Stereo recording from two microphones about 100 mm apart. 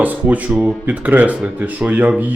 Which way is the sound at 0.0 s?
15° right (ahead or behind).